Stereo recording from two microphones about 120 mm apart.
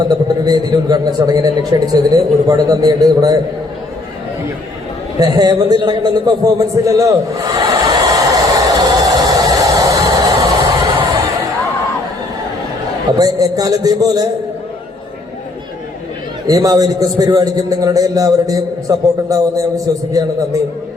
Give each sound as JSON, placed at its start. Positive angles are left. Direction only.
{"t": 0.0, "sound": "a man's voice", "side_deg": -35}
{"t": 5.2, "sound": "a sound", "side_deg": -35}
{"t": 13.1, "sound": "a man's voice", "side_deg": -30}
{"t": 16.5, "sound": "a man's voice", "side_deg": -30}